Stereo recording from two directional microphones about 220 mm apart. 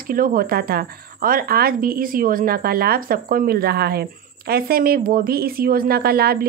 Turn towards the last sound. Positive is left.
turn(degrees=-45)  # may be behind; listen again after turning